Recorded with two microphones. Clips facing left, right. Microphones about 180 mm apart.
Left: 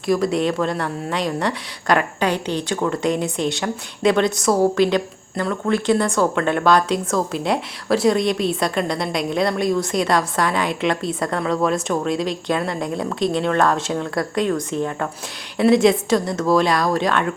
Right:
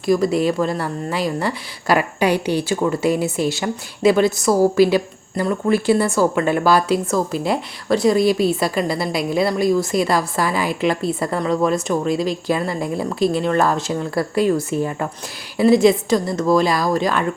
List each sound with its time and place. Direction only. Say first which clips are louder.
0.0 s a woman's voice: right 2 dB; centre (ahead or behind)